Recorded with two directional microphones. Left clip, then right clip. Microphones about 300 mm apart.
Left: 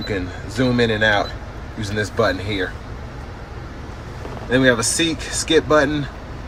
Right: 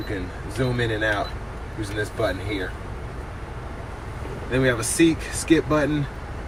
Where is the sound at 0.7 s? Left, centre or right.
Centre.